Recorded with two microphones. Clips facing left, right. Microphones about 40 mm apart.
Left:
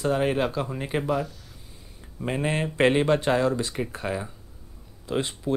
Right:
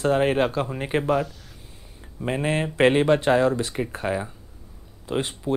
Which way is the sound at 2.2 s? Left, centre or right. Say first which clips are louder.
Right 2 dB; centre.